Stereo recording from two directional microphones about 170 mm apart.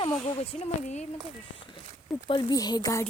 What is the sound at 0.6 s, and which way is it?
Speech, 45° left (ahead or behind).